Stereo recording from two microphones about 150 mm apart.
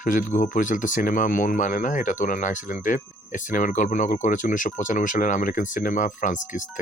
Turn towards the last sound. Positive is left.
turn(degrees=60)  # may be behind; listen again after turning